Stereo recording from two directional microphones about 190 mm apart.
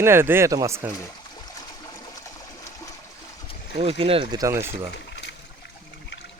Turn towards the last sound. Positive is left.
turn(degrees=65)  # may be behind; listen again after turning